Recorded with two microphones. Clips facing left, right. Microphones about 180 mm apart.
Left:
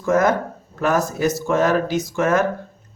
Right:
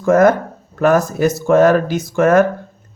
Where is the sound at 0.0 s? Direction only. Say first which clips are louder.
Right 6 dB; 55° right (ahead or behind).